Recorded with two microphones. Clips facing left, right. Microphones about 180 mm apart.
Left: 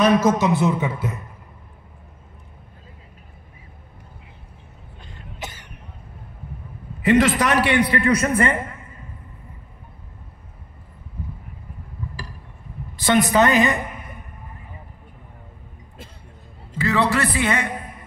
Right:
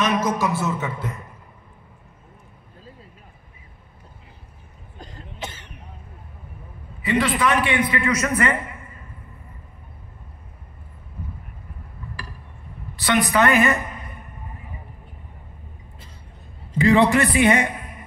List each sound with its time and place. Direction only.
0.0 s a man's voice: 30° left (ahead or behind); by 1.1 s 10° left (ahead or behind)
4.9 s throat clearing: 40° right (ahead or behind)
7.0 s a man's voice: 45° left (ahead or behind); by 8.5 s 30° left (ahead or behind)
13.2 s a man's voice: 25° left (ahead or behind)
16.7 s a man's voice: 15° right (ahead or behind)